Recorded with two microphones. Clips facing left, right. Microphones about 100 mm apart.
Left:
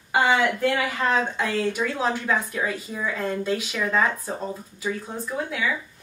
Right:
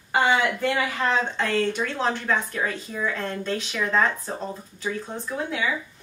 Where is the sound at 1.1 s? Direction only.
10° left (ahead or behind).